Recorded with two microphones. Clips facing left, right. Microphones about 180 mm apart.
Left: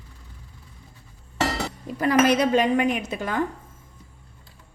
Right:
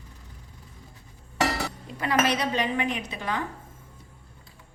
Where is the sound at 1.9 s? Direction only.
45° left (ahead or behind).